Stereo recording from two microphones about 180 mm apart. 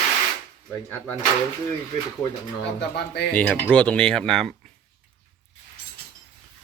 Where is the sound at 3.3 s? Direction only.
5° left (ahead or behind).